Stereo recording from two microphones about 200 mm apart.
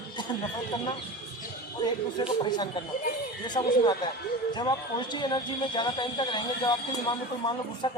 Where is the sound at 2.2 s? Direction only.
20° left (ahead or behind).